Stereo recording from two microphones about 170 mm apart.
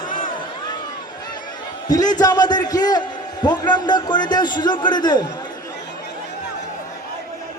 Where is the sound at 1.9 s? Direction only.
25° left (ahead or behind).